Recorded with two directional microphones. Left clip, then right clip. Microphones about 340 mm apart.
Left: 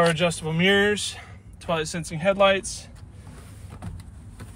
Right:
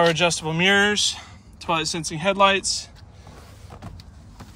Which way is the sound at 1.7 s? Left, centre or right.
Centre.